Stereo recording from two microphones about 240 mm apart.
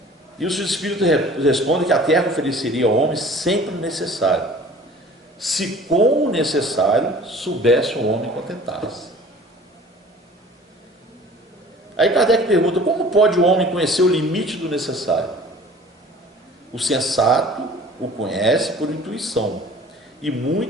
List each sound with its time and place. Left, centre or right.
0.3 s speech: centre
11.9 s a man's voice: centre
16.7 s speech: centre